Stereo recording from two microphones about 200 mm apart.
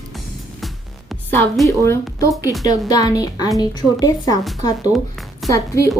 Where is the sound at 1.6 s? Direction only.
15° left (ahead or behind).